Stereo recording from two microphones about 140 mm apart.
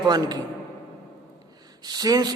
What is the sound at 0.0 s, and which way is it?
Speech, 30° right (ahead or behind).